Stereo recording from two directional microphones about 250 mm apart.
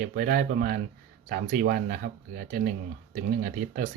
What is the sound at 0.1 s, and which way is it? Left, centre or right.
Speech, right.